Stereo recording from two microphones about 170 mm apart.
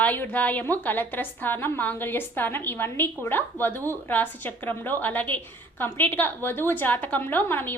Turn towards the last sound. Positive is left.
turn(degrees=10)  # may be behind; listen again after turning